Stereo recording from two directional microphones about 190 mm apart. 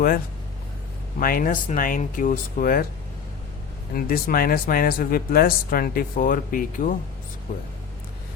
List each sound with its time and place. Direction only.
1.2 s speech: 50° left (ahead or behind)
3.9 s speech: 50° left (ahead or behind)